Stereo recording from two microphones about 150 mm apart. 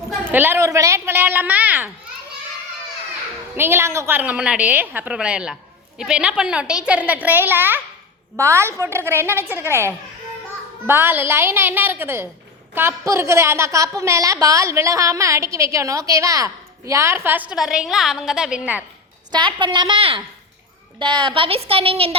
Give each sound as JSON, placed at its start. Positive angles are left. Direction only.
{"t": 0.3, "sound": "a woman's voice", "side_deg": -15}
{"t": 3.5, "sound": "a woman's voice", "side_deg": -15}
{"t": 19.3, "sound": "a woman's voice", "side_deg": -30}